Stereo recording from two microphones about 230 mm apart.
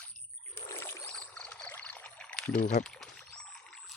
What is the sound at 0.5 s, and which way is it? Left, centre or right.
Rowboat, centre.